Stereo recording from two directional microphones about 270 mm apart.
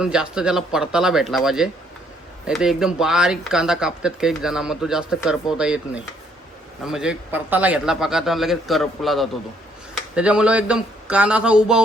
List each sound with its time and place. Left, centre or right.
0.0 s speech: centre